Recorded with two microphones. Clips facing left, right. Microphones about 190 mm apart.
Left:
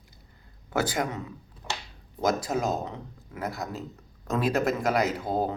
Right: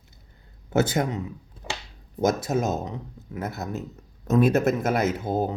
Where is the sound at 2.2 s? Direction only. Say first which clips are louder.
Right 3 dB; 25° right (ahead or behind).